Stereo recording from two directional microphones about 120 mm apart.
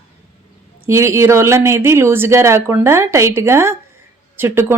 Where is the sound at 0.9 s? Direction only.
20° right (ahead or behind).